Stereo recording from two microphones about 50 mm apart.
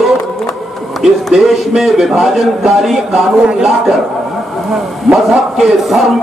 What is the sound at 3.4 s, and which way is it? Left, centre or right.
Speech, centre.